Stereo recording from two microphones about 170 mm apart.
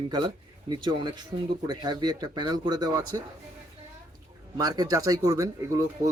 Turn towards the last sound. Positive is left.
turn(degrees=-20)  # may be behind; listen again after turning